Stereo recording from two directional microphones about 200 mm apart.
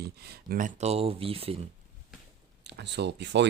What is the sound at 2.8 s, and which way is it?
Speech, 60° right (ahead or behind).